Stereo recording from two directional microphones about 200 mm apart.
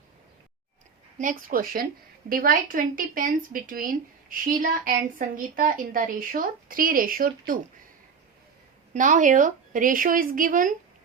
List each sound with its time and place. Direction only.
1.2 s a woman's voice: 40° right (ahead or behind)
8.9 s a woman's voice: 40° right (ahead or behind)